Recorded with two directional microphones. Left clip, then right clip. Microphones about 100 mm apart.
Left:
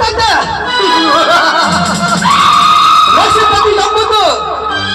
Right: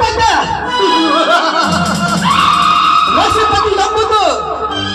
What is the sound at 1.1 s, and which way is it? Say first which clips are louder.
Music: left 3 dB; 50° right (ahead or behind).